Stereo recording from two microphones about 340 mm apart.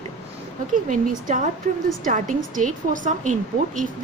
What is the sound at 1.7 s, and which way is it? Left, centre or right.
A woman's voice, right.